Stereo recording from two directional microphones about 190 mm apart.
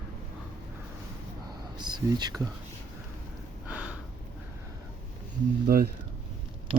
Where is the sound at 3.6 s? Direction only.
5° right (ahead or behind).